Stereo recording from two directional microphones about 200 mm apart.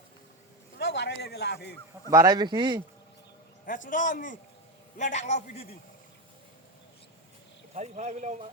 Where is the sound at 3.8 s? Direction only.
40° left (ahead or behind).